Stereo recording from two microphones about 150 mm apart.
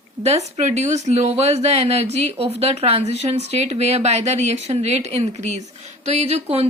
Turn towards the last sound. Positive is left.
turn(degrees=-45)  # may be behind; listen again after turning